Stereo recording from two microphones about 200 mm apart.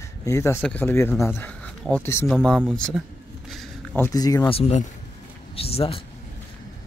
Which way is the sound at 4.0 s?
15° left (ahead or behind).